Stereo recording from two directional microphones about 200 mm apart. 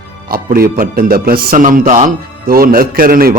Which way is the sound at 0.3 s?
50° right (ahead or behind).